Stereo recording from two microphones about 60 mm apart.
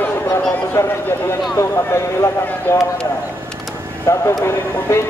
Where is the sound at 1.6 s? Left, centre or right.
Left.